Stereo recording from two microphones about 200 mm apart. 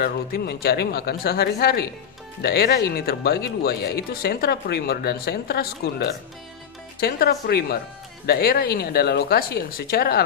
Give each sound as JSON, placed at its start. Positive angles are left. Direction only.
{"t": 0.0, "sound": "speech", "side_deg": 50}